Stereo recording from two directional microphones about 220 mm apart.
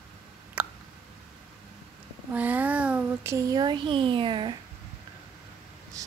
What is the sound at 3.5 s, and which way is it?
Speech, 20° right (ahead or behind).